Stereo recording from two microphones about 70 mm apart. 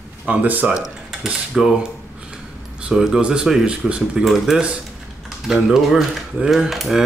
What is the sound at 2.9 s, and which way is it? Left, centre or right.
Speech, centre.